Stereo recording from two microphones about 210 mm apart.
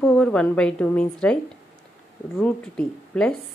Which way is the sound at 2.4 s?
5° left (ahead or behind).